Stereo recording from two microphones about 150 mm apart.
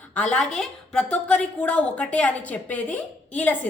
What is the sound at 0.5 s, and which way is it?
A woman's voice, 5° left (ahead or behind).